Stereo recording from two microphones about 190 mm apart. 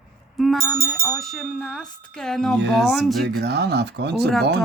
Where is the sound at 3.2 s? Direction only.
60° right (ahead or behind).